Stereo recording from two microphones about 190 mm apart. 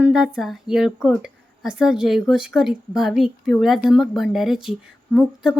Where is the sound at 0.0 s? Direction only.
5° right (ahead or behind).